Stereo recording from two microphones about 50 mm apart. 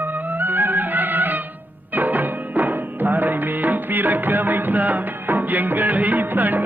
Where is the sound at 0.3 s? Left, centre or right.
Right.